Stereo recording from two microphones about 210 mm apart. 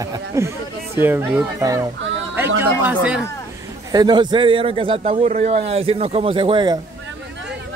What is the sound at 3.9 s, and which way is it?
A man's voice, 20° right (ahead or behind).